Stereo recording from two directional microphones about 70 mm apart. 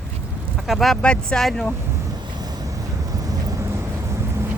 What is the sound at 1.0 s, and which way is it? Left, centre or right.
Speech, centre.